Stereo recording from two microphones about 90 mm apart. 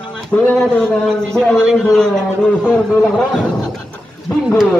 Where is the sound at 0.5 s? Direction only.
10° left (ahead or behind).